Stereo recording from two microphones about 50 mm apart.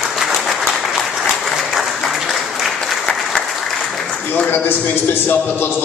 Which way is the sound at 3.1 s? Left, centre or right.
Centre.